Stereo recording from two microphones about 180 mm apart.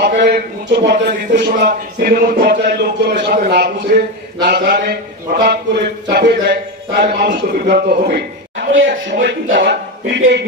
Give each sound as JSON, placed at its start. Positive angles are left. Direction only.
{"t": 0.0, "sound": "speech", "side_deg": -65}
{"t": 2.6, "sound": "speech", "side_deg": -65}